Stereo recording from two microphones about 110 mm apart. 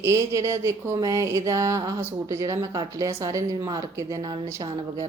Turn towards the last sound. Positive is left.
turn(degrees=-35)  # may be behind; listen again after turning